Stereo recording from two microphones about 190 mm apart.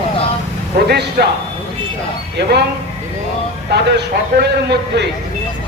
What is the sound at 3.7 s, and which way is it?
A man's voice, 60° right (ahead or behind).